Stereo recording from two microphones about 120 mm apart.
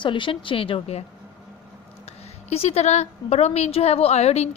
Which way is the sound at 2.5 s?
55° left (ahead or behind).